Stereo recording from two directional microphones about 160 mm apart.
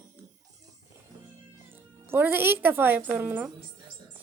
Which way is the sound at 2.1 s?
10° right (ahead or behind).